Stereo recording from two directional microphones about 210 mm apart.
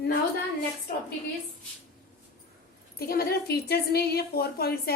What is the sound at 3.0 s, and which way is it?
A woman's voice, 45° left (ahead or behind).